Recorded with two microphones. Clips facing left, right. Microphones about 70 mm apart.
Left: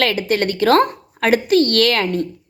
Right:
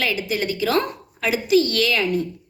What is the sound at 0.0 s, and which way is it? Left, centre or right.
A woman's voice, left.